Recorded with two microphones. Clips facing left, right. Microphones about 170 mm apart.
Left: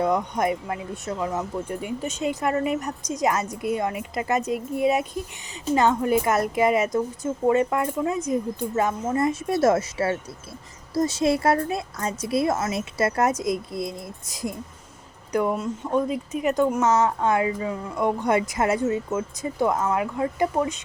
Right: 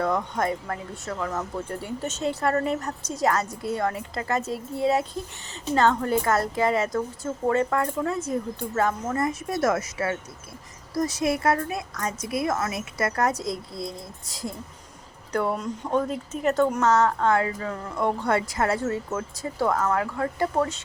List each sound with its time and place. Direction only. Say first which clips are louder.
0.0 s a woman's voice: left 2 dB; 15° left (ahead or behind)
16.8 s speech: even; 20° left (ahead or behind)